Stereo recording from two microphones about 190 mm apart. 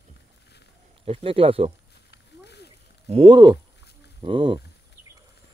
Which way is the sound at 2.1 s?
60° left (ahead or behind).